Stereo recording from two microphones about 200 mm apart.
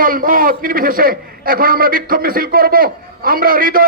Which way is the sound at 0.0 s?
45° right (ahead or behind).